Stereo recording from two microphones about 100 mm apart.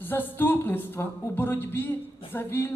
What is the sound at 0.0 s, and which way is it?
Speech, 20° left (ahead or behind).